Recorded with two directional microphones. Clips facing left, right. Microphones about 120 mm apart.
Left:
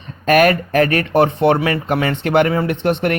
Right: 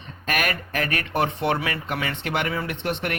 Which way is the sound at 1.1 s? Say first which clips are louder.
Left 7 dB; 35° left (ahead or behind).